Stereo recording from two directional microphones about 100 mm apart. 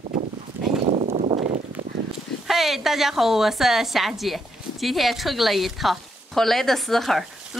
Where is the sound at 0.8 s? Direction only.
90° right.